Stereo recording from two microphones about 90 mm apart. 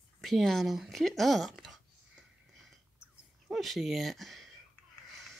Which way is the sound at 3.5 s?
Centre (ahead or behind).